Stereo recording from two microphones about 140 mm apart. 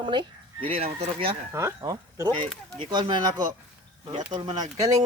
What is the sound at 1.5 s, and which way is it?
Speech, 25° right (ahead or behind).